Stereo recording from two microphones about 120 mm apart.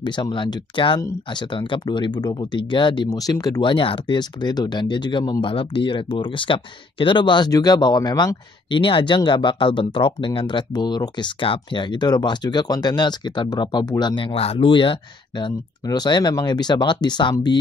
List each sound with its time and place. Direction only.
0.0 s speech: 40° left (ahead or behind)
3.7 s speech: 45° left (ahead or behind)